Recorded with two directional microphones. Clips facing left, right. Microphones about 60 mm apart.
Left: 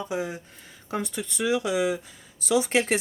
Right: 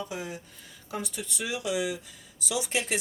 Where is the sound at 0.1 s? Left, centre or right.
Left.